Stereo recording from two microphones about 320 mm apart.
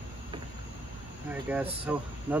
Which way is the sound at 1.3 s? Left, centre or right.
Centre.